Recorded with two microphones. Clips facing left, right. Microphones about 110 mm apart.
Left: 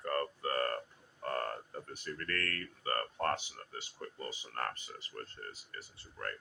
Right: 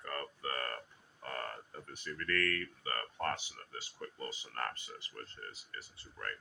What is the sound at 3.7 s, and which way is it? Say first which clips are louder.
Speech: even; 25° left (ahead or behind).